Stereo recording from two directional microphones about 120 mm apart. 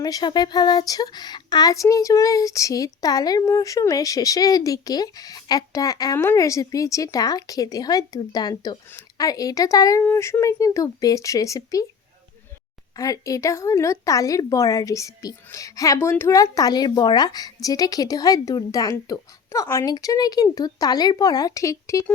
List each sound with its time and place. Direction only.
0.0 s speech: 35° left (ahead or behind)
13.0 s speech: 30° left (ahead or behind)